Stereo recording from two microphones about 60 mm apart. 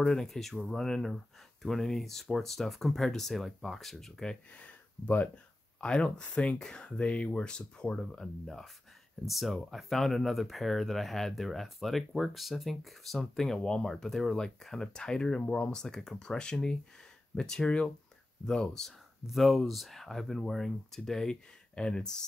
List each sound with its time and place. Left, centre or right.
0.0 s speech: centre
4.5 s speech: left